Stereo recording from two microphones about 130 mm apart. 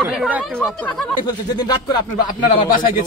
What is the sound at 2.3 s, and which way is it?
Speech, 90° left.